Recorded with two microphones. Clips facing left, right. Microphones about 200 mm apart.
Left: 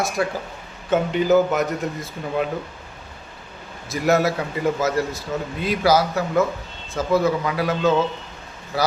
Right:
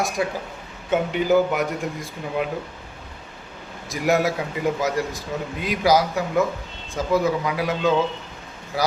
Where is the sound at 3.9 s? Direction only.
15° right (ahead or behind).